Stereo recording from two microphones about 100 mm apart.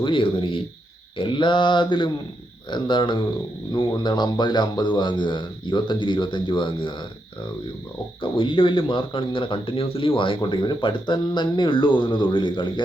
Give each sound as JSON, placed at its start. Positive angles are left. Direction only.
{"t": 0.0, "sound": "a man's voice", "side_deg": 60}
{"t": 8.2, "sound": "speech", "side_deg": 55}